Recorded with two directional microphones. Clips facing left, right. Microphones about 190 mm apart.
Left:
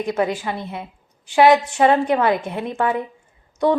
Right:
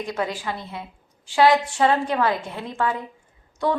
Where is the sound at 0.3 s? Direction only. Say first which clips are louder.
Left 4 dB; 20° left (ahead or behind).